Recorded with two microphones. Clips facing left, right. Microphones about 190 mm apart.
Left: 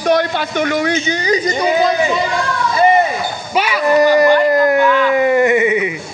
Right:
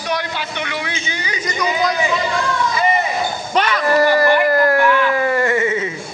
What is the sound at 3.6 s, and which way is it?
Speech, 10° left (ahead or behind).